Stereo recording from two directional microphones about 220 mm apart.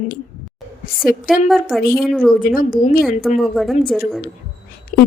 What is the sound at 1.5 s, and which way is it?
Speech, centre (ahead or behind).